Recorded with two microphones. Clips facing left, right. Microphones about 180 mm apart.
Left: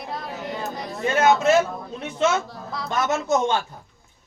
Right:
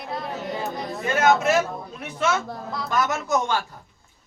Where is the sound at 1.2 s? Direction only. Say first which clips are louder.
Left 2 dB; 25° left (ahead or behind).